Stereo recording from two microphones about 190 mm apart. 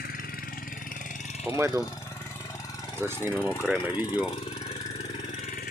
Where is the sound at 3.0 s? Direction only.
10° right (ahead or behind).